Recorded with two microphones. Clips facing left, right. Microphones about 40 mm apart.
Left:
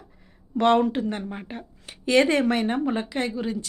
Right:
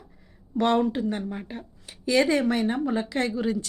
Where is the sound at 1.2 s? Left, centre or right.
Left.